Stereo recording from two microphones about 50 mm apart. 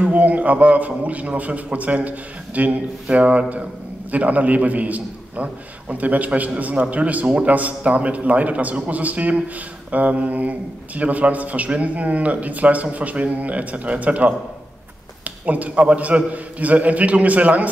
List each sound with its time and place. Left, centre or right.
0.0 s a man's voice: right